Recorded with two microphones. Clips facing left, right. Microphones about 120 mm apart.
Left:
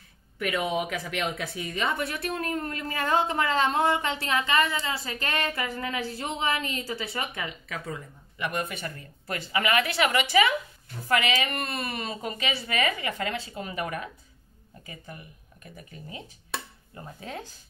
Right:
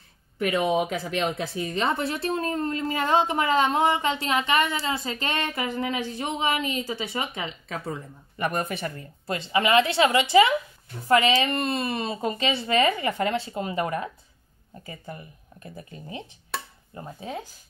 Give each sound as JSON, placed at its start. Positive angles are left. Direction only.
{"t": 0.4, "sound": "speech", "side_deg": -25}
{"t": 8.4, "sound": "speech", "side_deg": -40}
{"t": 9.3, "sound": "speech", "side_deg": -25}